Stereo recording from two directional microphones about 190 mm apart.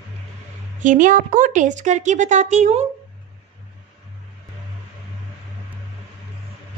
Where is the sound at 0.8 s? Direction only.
45° right (ahead or behind).